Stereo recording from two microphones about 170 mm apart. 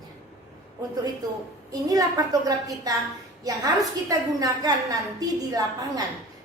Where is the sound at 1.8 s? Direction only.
20° right (ahead or behind).